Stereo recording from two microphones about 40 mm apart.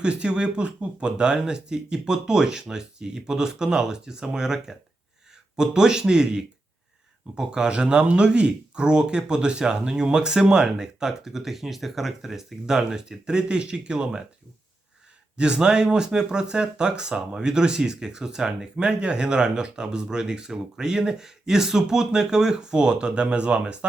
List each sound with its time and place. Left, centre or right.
0.0 s speech: right
15.4 s speech: right